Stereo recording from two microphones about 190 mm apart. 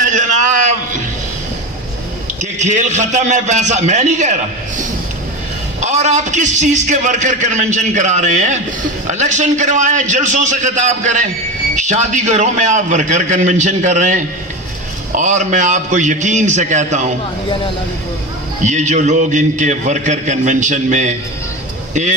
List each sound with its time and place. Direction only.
0.0 s a sound: 40° right (ahead or behind)
2.4 s a man's voice: 40° right (ahead or behind)
5.8 s a man's voice: 40° right (ahead or behind)
18.6 s a man's voice: 40° right (ahead or behind)